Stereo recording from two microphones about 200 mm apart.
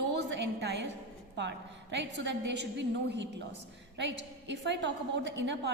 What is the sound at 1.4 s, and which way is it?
A woman's voice, 60° right (ahead or behind).